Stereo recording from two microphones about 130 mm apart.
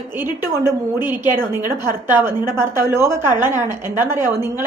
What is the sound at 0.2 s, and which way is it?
A woman's voice, 20° right (ahead or behind).